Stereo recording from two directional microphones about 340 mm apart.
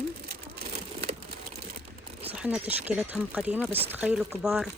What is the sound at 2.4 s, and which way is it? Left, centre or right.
Speech, centre.